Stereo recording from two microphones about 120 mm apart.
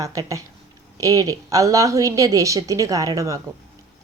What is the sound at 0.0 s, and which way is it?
A woman's voice, 30° right (ahead or behind).